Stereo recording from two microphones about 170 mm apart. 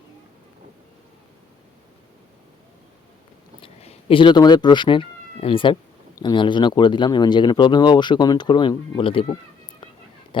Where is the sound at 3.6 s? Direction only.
35° left (ahead or behind).